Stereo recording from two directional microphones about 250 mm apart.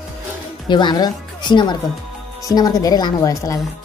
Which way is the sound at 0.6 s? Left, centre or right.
Centre.